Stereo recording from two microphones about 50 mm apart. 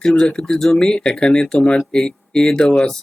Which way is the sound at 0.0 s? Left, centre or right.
Centre.